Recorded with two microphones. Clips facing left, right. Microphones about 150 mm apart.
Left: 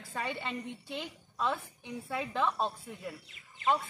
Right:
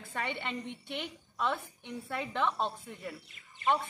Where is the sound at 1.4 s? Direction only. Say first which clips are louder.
Even; 10° left (ahead or behind).